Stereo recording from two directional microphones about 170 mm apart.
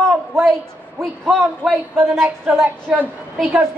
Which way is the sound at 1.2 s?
Centre (ahead or behind).